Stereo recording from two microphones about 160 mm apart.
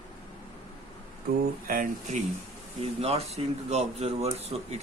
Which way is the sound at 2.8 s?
40° right (ahead or behind).